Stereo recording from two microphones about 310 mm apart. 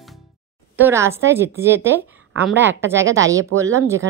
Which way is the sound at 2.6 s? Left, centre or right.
Right.